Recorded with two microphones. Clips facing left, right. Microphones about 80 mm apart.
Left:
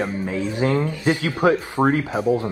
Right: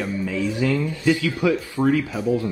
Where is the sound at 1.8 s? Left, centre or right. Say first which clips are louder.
Right 1 dB; left.